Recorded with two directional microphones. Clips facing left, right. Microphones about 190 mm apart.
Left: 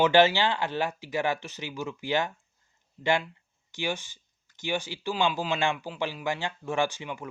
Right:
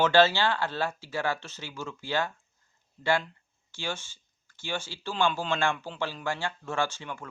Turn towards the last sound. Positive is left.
turn(degrees=15)  # may be behind; listen again after turning